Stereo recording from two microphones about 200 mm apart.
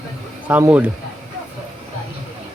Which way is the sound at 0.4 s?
10° right (ahead or behind).